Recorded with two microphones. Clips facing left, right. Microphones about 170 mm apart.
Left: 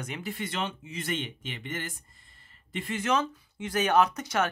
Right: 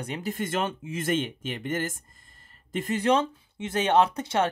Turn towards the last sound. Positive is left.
turn(degrees=-30)  # may be behind; listen again after turning